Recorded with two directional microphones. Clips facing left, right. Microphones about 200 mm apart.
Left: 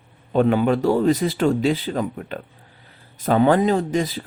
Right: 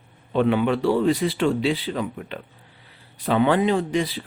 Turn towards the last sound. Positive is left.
turn(degrees=45)  # may be behind; listen again after turning